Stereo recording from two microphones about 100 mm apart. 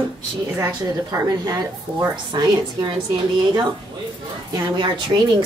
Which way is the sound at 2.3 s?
45° right (ahead or behind).